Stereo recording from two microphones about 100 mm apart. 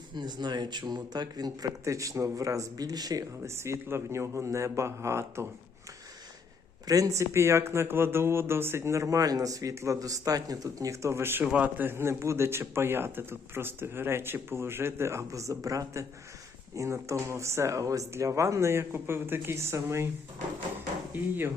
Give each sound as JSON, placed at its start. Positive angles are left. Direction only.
{"t": 0.1, "sound": "speech", "side_deg": -45}
{"t": 6.8, "sound": "a man's voice", "side_deg": -35}
{"t": 11.4, "sound": "a man's voice", "side_deg": -15}
{"t": 21.1, "sound": "speech", "side_deg": -20}